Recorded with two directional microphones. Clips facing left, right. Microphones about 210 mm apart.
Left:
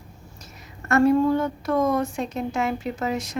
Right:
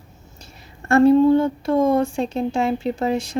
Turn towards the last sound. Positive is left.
turn(degrees=-30)  # may be behind; listen again after turning